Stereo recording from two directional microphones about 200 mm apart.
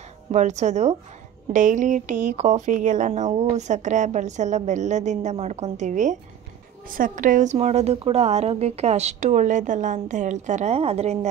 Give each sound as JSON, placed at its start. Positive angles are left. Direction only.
{"t": 0.3, "sound": "speech", "side_deg": -35}